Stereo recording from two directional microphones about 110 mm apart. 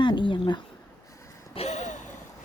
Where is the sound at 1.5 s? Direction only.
80° left.